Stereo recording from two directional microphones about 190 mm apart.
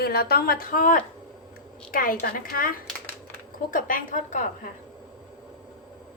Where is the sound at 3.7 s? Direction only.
45° left (ahead or behind).